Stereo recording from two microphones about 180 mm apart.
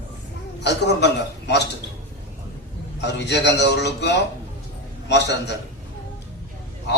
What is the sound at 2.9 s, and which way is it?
A man's voice, 70° left (ahead or behind).